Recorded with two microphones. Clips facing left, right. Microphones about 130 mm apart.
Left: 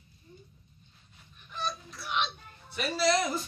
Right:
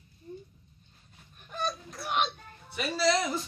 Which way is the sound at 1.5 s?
45° right (ahead or behind).